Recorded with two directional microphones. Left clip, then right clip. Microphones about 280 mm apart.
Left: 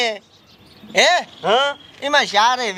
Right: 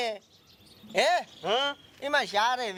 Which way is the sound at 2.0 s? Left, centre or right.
Right.